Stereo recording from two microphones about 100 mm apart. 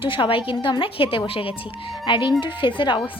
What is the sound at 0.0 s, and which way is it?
Speech, 60° left (ahead or behind).